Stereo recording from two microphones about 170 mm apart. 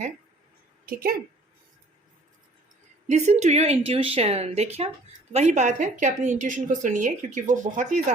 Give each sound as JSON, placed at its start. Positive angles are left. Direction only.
{"t": 0.9, "sound": "a woman's voice", "side_deg": -60}
{"t": 3.1, "sound": "a woman's voice", "side_deg": -45}